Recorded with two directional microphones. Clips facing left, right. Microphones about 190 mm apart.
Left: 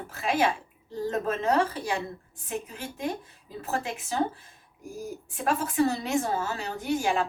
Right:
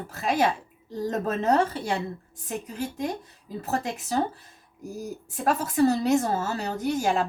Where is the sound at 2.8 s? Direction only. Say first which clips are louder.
Right 3 dB; 40° right (ahead or behind).